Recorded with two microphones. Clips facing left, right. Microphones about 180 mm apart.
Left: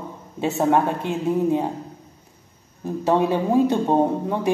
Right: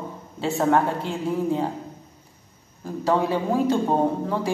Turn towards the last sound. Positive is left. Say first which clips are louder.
# left 2 dB
turn(degrees=20)  # may be behind; listen again after turning